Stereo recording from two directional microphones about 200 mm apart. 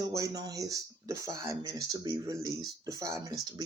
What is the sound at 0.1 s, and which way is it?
Speech, 15° right (ahead or behind).